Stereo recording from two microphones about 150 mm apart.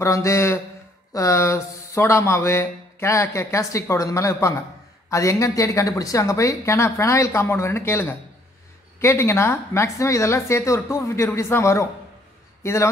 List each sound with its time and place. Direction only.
0.0 s speech: 20° left (ahead or behind)